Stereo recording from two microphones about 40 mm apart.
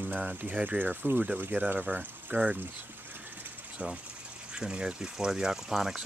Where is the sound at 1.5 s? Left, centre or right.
Right.